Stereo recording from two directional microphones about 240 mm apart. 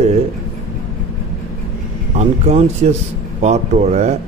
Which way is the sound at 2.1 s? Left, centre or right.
Right.